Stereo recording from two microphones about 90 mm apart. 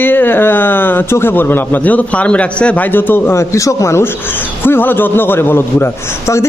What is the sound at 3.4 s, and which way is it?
Speech, 35° left (ahead or behind).